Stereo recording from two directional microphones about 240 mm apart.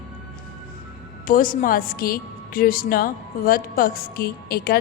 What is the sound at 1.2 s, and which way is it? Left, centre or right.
A woman's voice, left.